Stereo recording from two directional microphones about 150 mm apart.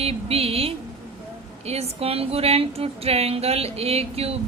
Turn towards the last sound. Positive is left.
turn(degrees=-40)  # may be behind; listen again after turning